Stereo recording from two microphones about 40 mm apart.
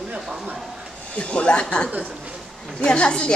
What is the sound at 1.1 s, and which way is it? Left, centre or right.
Speech, left.